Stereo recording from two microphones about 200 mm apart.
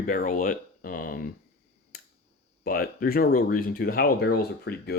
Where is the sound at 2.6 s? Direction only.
45° left (ahead or behind).